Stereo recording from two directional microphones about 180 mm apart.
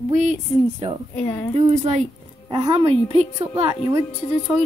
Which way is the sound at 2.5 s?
30° right (ahead or behind).